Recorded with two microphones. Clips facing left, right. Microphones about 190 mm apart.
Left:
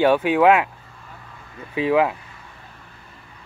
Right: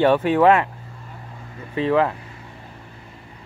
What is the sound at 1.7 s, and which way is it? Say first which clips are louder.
Speech: even; 5° left (ahead or behind).